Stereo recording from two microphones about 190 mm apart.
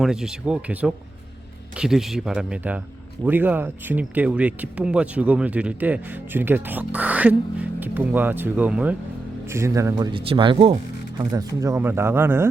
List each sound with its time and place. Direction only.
0.0 s speech: 5° right (ahead or behind)
9.9 s speech: 25° right (ahead or behind); by 12.5 s 10° right (ahead or behind)